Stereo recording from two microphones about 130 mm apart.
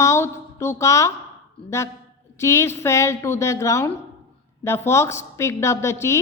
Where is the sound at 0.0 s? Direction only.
20° left (ahead or behind).